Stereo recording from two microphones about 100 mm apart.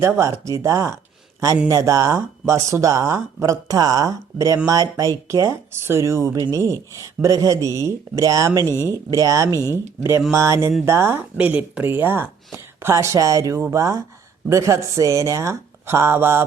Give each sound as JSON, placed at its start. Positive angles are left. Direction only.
{"t": 0.0, "sound": "speech", "side_deg": -30}
{"t": 8.6, "sound": "speech", "side_deg": 25}
{"t": 8.9, "sound": "speech", "side_deg": -35}
{"t": 11.3, "sound": "speech", "side_deg": -15}